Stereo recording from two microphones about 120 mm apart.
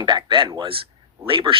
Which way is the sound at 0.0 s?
35° right (ahead or behind).